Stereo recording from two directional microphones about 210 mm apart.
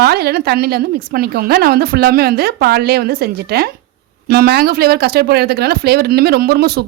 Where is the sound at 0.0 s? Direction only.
50° right (ahead or behind).